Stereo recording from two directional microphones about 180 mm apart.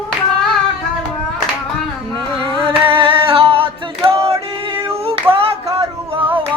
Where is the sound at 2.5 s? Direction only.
30° right (ahead or behind).